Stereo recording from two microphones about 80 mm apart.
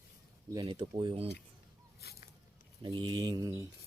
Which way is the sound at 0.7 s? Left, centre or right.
Right.